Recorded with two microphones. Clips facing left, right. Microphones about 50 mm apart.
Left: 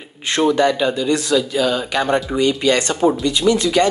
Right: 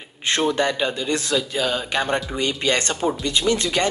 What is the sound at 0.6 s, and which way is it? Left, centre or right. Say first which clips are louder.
Speech: left 5 dB; right.